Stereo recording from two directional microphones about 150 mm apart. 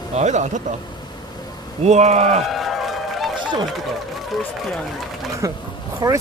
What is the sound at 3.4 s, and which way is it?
Run, 30° right (ahead or behind).